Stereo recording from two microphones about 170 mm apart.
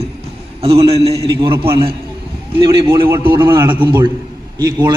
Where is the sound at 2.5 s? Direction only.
25° right (ahead or behind).